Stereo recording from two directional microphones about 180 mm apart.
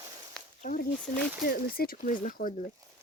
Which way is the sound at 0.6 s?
50° left (ahead or behind).